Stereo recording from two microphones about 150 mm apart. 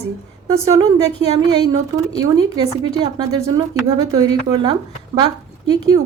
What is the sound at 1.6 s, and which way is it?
Speech, 25° right (ahead or behind).